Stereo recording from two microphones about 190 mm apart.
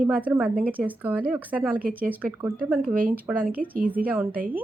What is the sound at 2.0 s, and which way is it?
Speech, 10° right (ahead or behind).